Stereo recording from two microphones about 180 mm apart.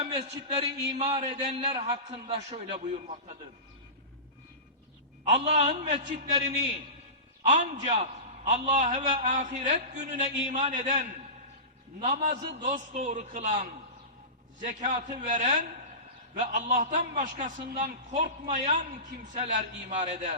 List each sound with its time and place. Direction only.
0.0 s a man's voice: 35° right (ahead or behind)
5.2 s a man's voice: 35° right (ahead or behind)
17.6 s speech: 55° right (ahead or behind)
18.1 s a man's voice: 40° right (ahead or behind)